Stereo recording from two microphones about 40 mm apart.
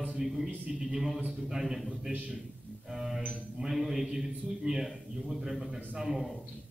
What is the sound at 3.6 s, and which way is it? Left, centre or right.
A man's voice, centre.